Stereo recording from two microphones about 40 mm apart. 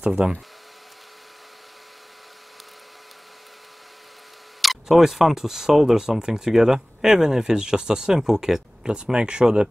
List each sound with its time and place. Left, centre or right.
0.2 s speech: right
4.6 s speech: centre
8.8 s speech: right